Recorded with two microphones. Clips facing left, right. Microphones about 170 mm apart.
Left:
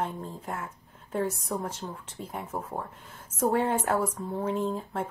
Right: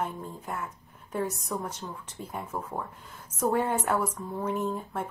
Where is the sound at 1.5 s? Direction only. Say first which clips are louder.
Left 1 dB; 30° left (ahead or behind).